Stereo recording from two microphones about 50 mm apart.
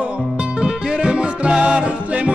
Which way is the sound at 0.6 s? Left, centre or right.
Centre.